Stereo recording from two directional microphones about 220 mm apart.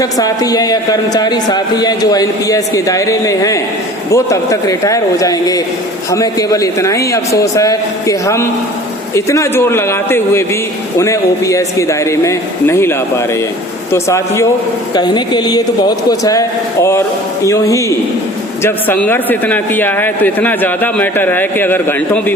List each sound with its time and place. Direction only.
0.0 s a man's voice: 15° left (ahead or behind)
17.4 s a man's voice: 15° left (ahead or behind)